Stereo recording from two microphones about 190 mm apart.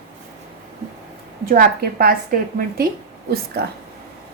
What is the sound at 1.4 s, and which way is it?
A woman's voice, 55° right (ahead or behind).